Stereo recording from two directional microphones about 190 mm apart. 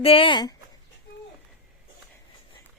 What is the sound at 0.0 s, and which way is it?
Speech, 30° left (ahead or behind).